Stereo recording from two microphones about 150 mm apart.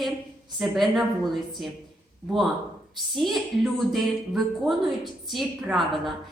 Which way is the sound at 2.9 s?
Centre (ahead or behind).